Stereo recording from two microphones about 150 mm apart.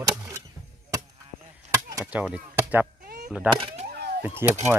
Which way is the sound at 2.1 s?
10° right (ahead or behind).